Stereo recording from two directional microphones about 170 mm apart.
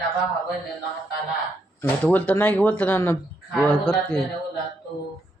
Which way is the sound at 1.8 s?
10° left (ahead or behind).